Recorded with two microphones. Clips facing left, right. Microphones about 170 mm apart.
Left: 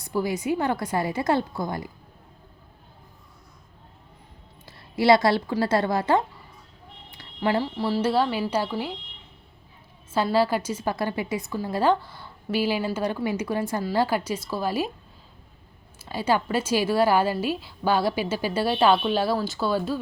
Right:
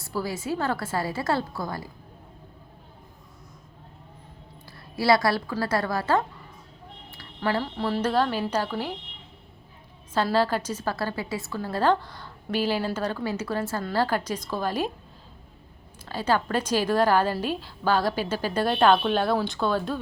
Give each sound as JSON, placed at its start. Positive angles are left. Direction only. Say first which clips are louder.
{"t": 0.0, "sound": "a woman's voice", "louder": "left 4 dB", "side_deg": 20}
{"t": 4.6, "sound": "a woman's voice", "louder": "left 4 dB", "side_deg": 20}
{"t": 7.1, "sound": "a sound", "louder": "left 3 dB", "side_deg": 20}
{"t": 7.8, "sound": "a woman's voice", "louder": "left 1 dB", "side_deg": 5}
{"t": 10.3, "sound": "a woman's voice", "louder": "left 3 dB", "side_deg": 10}
{"t": 16.0, "sound": "a woman's voice", "louder": "left 1 dB", "side_deg": 10}